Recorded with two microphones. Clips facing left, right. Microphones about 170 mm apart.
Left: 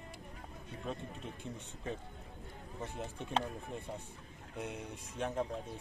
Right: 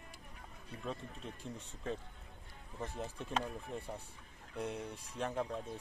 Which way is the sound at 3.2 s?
30° left (ahead or behind).